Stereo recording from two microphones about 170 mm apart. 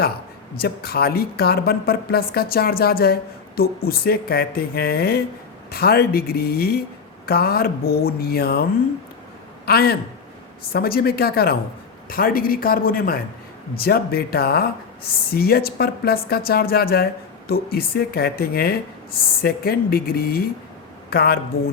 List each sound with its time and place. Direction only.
0.5 s a woman's voice: 65° left (ahead or behind)
9.6 s a woman's voice: 65° left (ahead or behind)